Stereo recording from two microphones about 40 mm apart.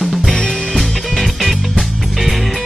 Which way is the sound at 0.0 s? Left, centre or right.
Centre.